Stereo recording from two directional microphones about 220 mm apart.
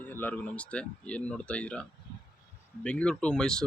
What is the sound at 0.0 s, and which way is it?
Speech, 10° left (ahead or behind).